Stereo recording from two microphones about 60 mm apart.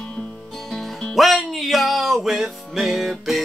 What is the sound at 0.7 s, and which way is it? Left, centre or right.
Music, centre.